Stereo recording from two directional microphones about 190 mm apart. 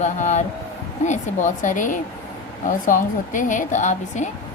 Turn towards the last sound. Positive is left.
turn(degrees=40)  # may be behind; listen again after turning